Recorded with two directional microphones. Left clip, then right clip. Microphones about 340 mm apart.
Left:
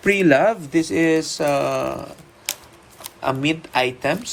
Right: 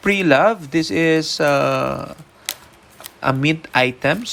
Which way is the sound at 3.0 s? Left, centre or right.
Right.